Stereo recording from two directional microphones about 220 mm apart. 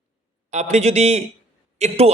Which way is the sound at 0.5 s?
30° right (ahead or behind).